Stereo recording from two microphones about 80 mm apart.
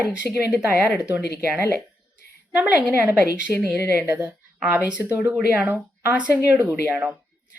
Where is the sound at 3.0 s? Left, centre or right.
Right.